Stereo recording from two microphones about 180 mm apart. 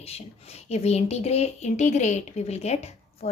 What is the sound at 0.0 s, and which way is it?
Speech, 35° left (ahead or behind).